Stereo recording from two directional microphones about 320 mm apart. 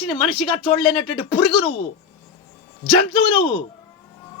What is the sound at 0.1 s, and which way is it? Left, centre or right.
Speech, centre.